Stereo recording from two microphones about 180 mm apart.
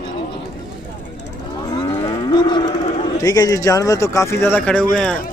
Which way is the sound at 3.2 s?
20° left (ahead or behind).